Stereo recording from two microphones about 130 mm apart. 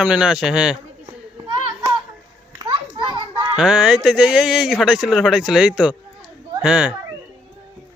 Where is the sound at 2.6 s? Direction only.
35° right (ahead or behind).